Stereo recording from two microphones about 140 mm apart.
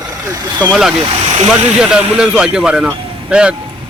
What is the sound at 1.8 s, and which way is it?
A man's voice, 5° right (ahead or behind).